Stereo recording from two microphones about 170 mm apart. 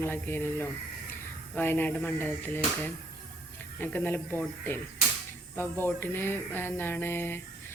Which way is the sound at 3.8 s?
10° left (ahead or behind).